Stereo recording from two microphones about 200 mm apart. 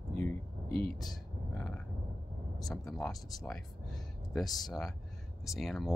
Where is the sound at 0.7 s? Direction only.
25° right (ahead or behind).